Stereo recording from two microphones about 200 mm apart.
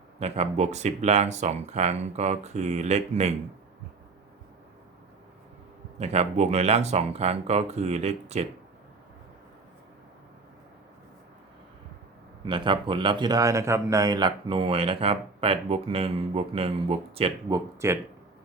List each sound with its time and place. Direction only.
0.2 s speech: 30° right (ahead or behind)
6.0 s speech: 30° right (ahead or behind)
12.5 s speech: 25° right (ahead or behind)
17.7 s speech: 15° right (ahead or behind)